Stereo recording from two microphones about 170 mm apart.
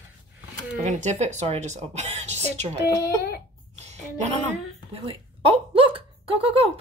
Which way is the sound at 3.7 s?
40° right (ahead or behind).